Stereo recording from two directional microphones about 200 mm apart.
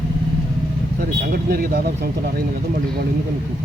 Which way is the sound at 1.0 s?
50° right (ahead or behind).